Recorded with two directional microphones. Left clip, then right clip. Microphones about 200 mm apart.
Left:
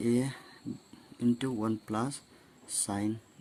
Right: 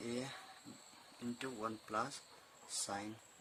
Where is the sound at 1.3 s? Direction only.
35° left (ahead or behind).